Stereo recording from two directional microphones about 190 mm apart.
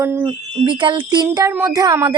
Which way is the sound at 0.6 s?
25° right (ahead or behind).